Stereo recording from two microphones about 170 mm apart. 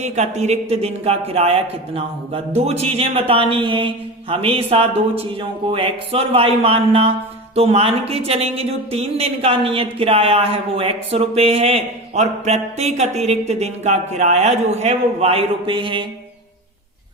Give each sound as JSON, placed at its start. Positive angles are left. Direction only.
{"t": 0.0, "sound": "speech", "side_deg": -40}